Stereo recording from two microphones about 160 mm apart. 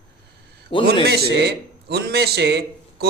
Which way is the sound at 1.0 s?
90° right.